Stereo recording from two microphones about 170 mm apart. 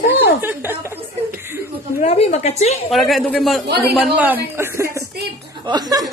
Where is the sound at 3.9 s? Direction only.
10° right (ahead or behind).